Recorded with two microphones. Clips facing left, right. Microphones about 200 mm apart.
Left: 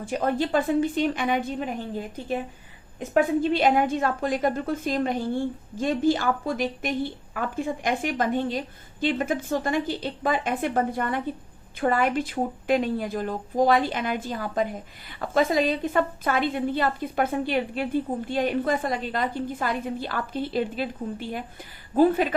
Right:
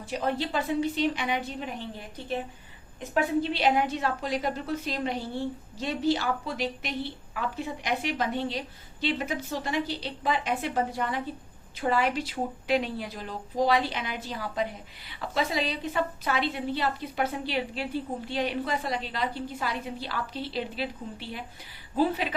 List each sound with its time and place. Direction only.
0.0 s a woman's voice: 50° left (ahead or behind)
3.2 s a woman's voice: 50° left (ahead or behind)